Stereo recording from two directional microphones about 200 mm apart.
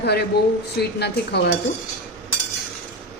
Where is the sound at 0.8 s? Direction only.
55° left (ahead or behind).